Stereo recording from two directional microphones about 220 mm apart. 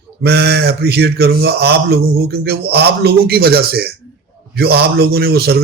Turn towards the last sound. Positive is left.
turn(degrees=-45)  # may be behind; listen again after turning